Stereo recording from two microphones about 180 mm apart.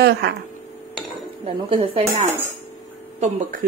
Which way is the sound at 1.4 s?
30° right (ahead or behind).